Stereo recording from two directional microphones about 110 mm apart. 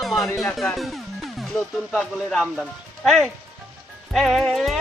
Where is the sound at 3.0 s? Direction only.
Centre (ahead or behind).